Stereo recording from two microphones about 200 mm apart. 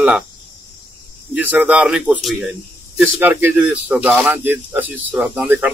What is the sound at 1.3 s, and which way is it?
Speech, 5° right (ahead or behind).